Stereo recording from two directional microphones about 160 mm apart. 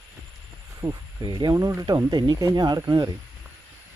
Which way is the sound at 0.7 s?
25° right (ahead or behind).